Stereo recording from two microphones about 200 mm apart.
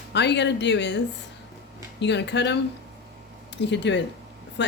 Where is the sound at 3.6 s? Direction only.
60° left (ahead or behind).